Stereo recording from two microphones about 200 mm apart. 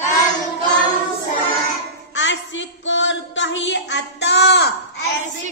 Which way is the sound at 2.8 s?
65° left (ahead or behind).